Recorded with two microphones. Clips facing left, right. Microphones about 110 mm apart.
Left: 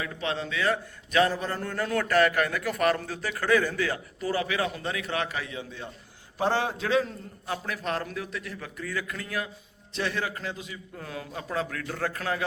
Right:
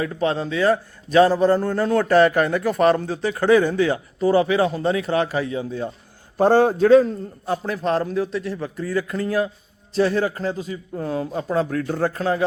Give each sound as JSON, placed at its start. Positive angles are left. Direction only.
{"t": 0.0, "sound": "a man's voice", "side_deg": -35}